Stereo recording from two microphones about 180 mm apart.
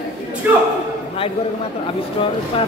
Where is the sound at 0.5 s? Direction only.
10° right (ahead or behind).